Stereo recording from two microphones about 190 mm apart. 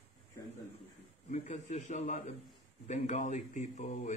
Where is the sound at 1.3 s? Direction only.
40° left (ahead or behind).